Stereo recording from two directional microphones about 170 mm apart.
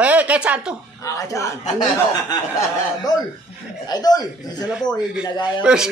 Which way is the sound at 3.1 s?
25° left (ahead or behind).